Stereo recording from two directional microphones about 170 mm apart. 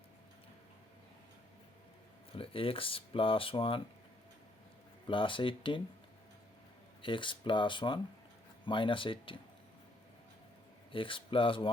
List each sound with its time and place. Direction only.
2.3 s speech: 30° left (ahead or behind)
5.0 s speech: 30° left (ahead or behind)
7.0 s speech: 30° left (ahead or behind)
10.9 s speech: 30° left (ahead or behind)